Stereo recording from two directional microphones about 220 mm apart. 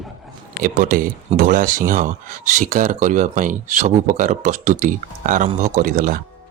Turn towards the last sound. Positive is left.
turn(degrees=-40)  # may be behind; listen again after turning